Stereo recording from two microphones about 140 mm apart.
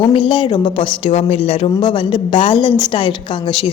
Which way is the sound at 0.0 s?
40° left (ahead or behind).